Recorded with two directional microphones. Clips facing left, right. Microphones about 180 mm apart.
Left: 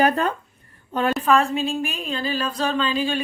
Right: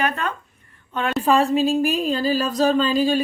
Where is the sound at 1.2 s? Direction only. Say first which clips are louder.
Right 5 dB; 35° right (ahead or behind).